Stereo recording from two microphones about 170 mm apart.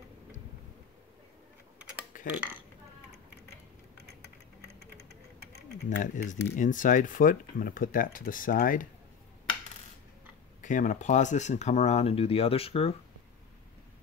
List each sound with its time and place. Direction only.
2.1 s dishes: 50° left (ahead or behind)
5.9 s speech: 50° left (ahead or behind)
10.6 s speech: 50° left (ahead or behind)